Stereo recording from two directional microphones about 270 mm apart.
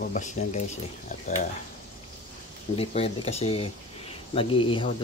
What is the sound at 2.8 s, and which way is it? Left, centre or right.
Speech, left.